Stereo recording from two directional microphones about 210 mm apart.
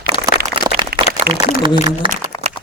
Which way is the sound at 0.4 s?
20° right (ahead or behind).